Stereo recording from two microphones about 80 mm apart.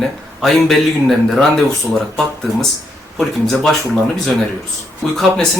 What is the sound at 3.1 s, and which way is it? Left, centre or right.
Speech, centre.